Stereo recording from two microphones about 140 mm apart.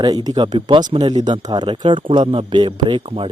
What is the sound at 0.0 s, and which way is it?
Speech, 30° right (ahead or behind).